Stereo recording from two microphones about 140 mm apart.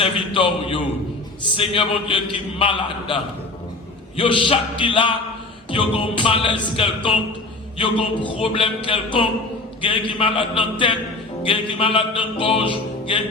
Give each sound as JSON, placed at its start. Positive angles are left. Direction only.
{"t": 0.0, "sound": "music", "side_deg": 40}
{"t": 4.2, "sound": "music", "side_deg": 35}